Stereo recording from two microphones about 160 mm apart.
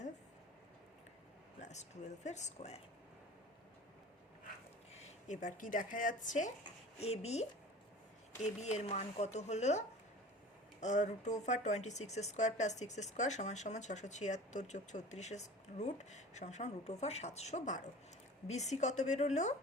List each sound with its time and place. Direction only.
1.6 s speech: 45° left (ahead or behind)
4.9 s speech: 45° left (ahead or behind)
7.0 s speech: 40° left (ahead or behind)